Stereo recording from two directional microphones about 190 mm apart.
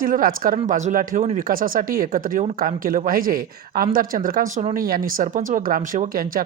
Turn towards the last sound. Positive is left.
turn(degrees=-50)  # may be behind; listen again after turning